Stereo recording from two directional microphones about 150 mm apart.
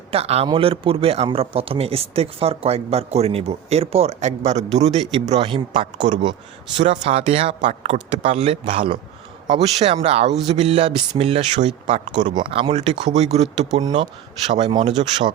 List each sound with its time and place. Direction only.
0.1 s a man's voice: 45° right (ahead or behind)
6.7 s speech: 50° right (ahead or behind); by 9.0 s 35° right (ahead or behind)
9.6 s speech: 45° right (ahead or behind)
12.1 s speech: 30° right (ahead or behind)